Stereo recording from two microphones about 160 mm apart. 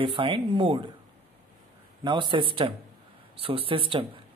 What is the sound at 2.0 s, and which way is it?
Speech, 30° right (ahead or behind).